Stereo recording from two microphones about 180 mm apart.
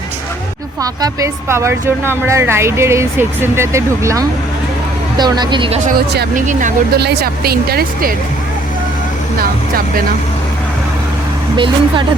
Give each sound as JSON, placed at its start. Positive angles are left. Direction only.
{"t": 0.8, "sound": "a woman's voice", "side_deg": -20}
{"t": 6.3, "sound": "speech", "side_deg": -45}
{"t": 6.9, "sound": "speech", "side_deg": -60}
{"t": 9.4, "sound": "speech", "side_deg": -55}
{"t": 11.5, "sound": "speech", "side_deg": -25}